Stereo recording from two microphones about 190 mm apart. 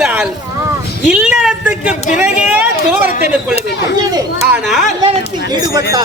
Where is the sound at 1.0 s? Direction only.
5° right (ahead or behind).